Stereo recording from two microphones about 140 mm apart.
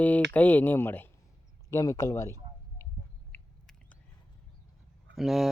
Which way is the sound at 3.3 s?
15° left (ahead or behind).